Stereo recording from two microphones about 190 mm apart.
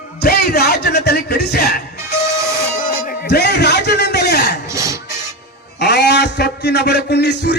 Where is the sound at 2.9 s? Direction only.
55° left (ahead or behind).